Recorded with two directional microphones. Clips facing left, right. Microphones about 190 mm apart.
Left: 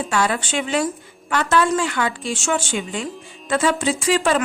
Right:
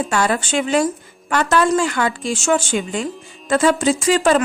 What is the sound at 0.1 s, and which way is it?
A woman's voice, 45° right (ahead or behind).